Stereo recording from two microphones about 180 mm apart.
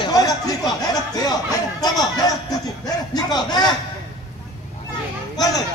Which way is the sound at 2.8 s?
20° left (ahead or behind).